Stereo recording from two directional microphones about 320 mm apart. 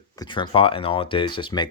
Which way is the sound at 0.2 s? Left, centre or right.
Centre.